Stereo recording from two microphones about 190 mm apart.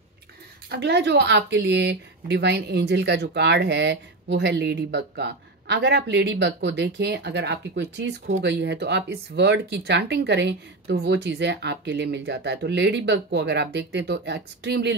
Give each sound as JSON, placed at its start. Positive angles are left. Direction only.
{"t": 0.7, "sound": "speech", "side_deg": -60}